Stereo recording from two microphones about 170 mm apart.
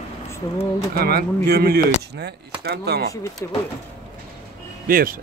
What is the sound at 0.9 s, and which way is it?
Speech, 65° right (ahead or behind).